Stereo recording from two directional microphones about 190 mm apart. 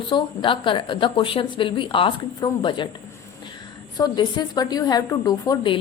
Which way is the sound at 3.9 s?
20° left (ahead or behind).